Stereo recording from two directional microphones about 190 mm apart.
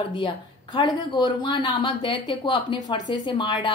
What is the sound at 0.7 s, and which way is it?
A woman's voice, 25° left (ahead or behind).